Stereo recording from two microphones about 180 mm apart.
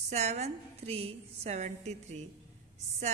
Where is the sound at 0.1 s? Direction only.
35° right (ahead or behind).